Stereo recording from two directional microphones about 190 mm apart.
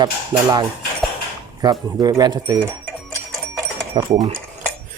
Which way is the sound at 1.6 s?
20° right (ahead or behind).